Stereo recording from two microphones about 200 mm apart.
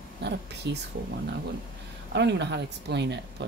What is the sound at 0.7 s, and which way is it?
Speech, 60° right (ahead or behind).